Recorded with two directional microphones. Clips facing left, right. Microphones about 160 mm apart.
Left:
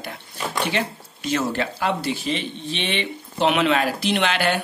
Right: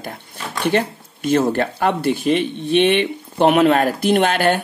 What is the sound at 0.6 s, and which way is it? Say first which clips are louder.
Speech: right 10 dB; 50° right (ahead or behind).